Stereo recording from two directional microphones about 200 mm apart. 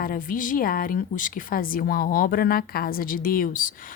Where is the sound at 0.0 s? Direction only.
45° left (ahead or behind).